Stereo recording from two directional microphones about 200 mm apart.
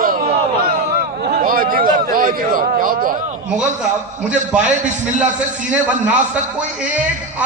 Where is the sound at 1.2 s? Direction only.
50° right (ahead or behind).